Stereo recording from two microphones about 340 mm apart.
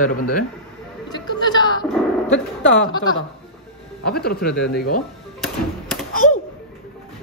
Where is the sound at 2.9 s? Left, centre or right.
Centre.